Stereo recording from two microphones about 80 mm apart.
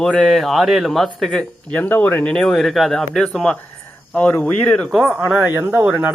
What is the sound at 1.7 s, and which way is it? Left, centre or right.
Speech, left.